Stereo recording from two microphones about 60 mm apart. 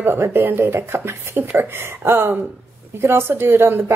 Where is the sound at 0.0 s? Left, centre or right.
Right.